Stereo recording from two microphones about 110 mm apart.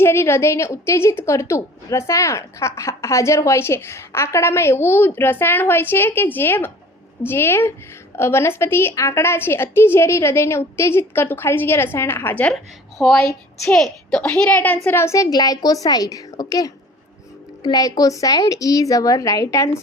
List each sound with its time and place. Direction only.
0.0 s a woman's voice: 25° left (ahead or behind)
13.0 s a woman's voice: 5° left (ahead or behind); by 19.7 s 30° left (ahead or behind)